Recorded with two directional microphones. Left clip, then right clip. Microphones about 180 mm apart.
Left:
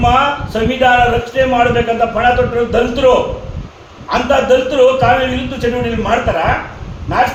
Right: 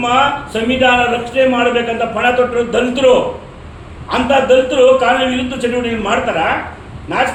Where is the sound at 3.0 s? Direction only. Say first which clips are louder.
Even; 20° right (ahead or behind).